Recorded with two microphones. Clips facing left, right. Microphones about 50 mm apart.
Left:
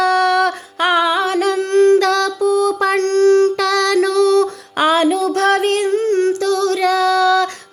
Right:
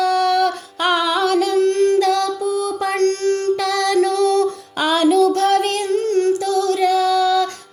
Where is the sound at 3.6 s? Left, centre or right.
Left.